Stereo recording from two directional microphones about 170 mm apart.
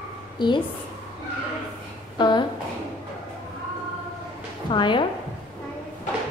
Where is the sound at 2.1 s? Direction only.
25° left (ahead or behind).